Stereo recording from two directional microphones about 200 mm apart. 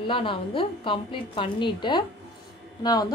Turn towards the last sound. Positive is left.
turn(degrees=20)  # may be behind; listen again after turning